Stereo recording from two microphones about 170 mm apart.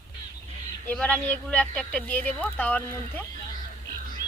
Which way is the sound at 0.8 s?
5° left (ahead or behind).